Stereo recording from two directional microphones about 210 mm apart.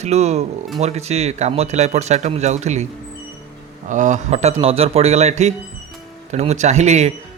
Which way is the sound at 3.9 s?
35° right (ahead or behind).